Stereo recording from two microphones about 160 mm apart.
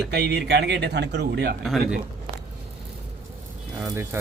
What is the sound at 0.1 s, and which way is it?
A man's voice, 90° right.